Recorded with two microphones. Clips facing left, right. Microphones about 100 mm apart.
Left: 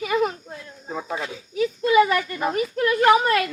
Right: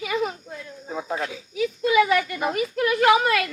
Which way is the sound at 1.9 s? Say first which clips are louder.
Left 2 dB; 35° left (ahead or behind).